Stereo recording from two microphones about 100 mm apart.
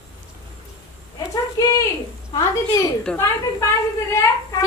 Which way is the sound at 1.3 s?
35° left (ahead or behind).